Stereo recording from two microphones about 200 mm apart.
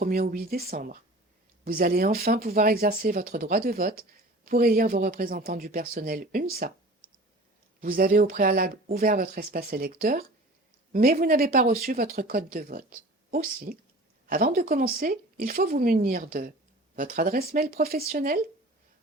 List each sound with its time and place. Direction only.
0.0 s speech: 45° right (ahead or behind)
7.8 s speech: 45° right (ahead or behind)